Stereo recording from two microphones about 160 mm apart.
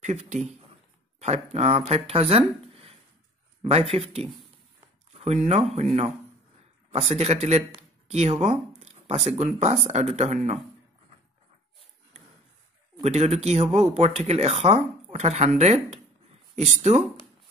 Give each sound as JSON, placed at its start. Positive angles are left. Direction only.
{"t": 0.0, "sound": "speech", "side_deg": -45}
{"t": 5.2, "sound": "speech", "side_deg": -40}
{"t": 6.9, "sound": "speech", "side_deg": -40}
{"t": 13.0, "sound": "speech", "side_deg": -40}